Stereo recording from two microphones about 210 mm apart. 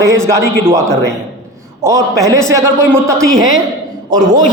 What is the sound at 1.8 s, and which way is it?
A man's voice, 15° right (ahead or behind).